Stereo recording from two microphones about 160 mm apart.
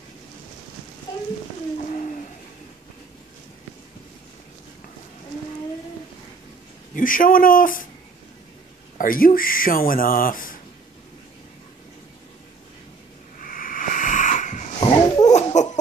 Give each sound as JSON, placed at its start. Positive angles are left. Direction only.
{"t": 1.8, "sound": "a sound", "side_deg": 45}
{"t": 7.0, "sound": "speech", "side_deg": 60}
{"t": 8.9, "sound": "speech", "side_deg": 60}
{"t": 13.4, "sound": "wheeze", "side_deg": 60}
{"t": 14.8, "sound": "dog", "side_deg": 25}
{"t": 15.2, "sound": "a sound", "side_deg": 45}